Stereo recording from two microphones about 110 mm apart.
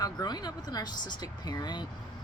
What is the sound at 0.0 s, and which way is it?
Speech, 40° left (ahead or behind).